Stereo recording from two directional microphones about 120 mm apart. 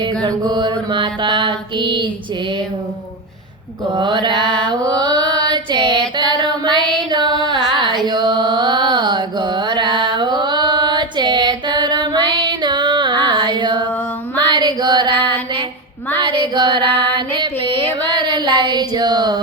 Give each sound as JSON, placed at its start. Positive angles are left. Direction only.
{"t": 0.0, "sound": "mantra", "side_deg": -35}
{"t": 3.9, "sound": "mantra", "side_deg": -40}
{"t": 4.4, "sound": "music", "side_deg": 5}
{"t": 4.7, "sound": "mantra", "side_deg": -35}
{"t": 6.1, "sound": "a sound", "side_deg": -40}
{"t": 7.1, "sound": "music", "side_deg": -40}
{"t": 14.5, "sound": "female singing", "side_deg": -40}
{"t": 16.2, "sound": "female singing", "side_deg": -40}
{"t": 18.3, "sound": "a sound", "side_deg": -40}